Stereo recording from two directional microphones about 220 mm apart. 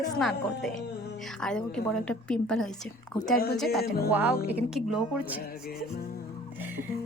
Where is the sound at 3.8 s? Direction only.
45° left (ahead or behind).